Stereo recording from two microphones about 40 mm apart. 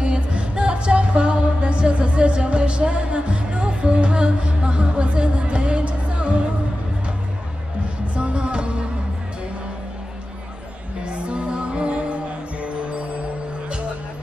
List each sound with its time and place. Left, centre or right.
0.0 s music: right
8.1 s music: right
11.1 s music: right